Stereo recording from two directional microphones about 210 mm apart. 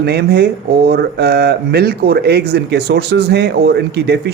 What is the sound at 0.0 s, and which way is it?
Speech, 50° right (ahead or behind).